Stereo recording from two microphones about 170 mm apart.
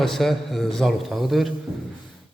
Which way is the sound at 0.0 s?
Centre (ahead or behind).